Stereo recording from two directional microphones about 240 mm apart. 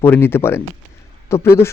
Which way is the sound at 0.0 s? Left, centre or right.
Centre.